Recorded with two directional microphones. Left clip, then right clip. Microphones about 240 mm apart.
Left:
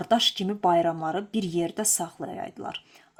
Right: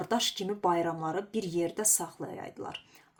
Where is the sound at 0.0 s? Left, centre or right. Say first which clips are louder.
Left 7 dB; left.